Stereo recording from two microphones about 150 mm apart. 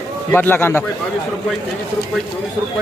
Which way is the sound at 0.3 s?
15° left (ahead or behind).